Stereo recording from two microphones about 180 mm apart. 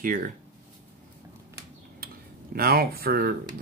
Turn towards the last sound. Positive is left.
turn(degrees=-55)  # may be behind; listen again after turning